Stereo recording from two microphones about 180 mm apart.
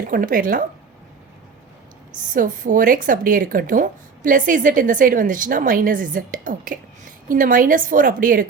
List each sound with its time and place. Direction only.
0.0 s a woman's voice: 50° right (ahead or behind)
2.2 s a woman's voice: 45° right (ahead or behind)